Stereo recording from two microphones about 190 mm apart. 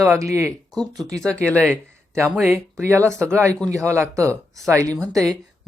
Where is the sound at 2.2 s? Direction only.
5° right (ahead or behind).